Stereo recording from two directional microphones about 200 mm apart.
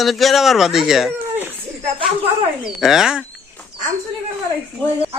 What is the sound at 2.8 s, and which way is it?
Speech, centre (ahead or behind).